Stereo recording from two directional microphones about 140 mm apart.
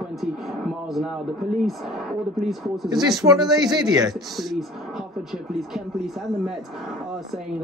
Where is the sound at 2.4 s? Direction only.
Centre (ahead or behind).